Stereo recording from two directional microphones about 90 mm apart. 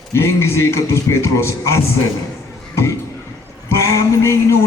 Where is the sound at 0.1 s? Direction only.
30° left (ahead or behind).